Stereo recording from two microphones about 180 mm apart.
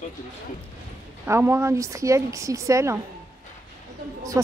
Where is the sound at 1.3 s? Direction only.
15° right (ahead or behind).